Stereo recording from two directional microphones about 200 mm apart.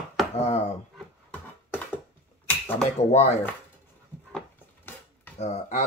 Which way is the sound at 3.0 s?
30° left (ahead or behind).